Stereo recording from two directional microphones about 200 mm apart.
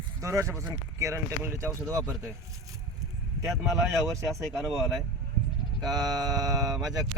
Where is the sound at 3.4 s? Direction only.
Centre (ahead or behind).